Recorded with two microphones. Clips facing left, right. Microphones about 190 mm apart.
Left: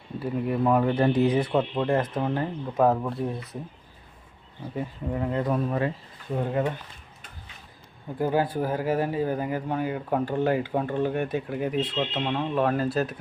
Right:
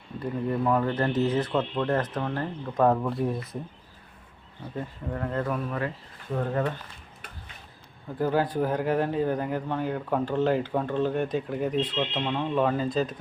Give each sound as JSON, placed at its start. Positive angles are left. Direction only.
{"t": 0.2, "sound": "speech", "side_deg": 10}
{"t": 4.7, "sound": "speech", "side_deg": 10}
{"t": 5.5, "sound": "speech", "side_deg": 25}
{"t": 6.3, "sound": "speech", "side_deg": 15}
{"t": 8.2, "sound": "speech", "side_deg": 10}